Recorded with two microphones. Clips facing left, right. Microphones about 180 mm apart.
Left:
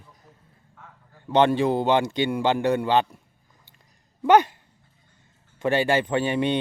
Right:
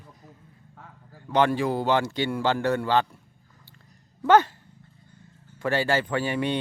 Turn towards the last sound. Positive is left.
turn(degrees=20)  # may be behind; listen again after turning